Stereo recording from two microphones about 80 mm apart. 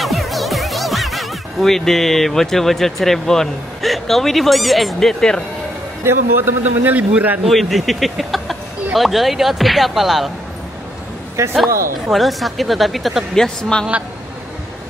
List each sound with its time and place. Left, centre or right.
0.0 s speech: centre
6.0 s a man's voice: right
7.4 s speech: centre
11.4 s a man's voice: right
12.1 s speech: centre